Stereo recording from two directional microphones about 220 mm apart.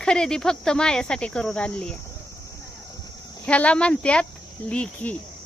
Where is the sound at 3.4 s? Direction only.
5° left (ahead or behind).